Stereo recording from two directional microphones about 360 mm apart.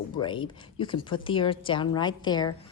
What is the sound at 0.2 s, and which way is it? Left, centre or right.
Speech, centre.